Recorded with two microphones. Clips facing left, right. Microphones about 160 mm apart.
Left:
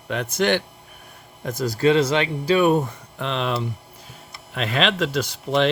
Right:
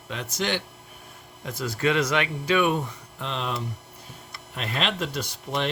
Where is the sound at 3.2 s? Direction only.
80° left.